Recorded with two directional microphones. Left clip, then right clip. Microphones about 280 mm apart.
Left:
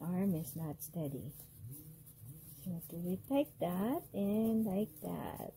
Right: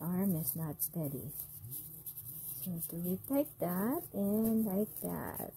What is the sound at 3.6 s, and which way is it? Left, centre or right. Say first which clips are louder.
Speech: right 1 dB; right.